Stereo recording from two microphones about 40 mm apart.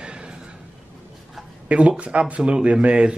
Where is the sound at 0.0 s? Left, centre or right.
Right.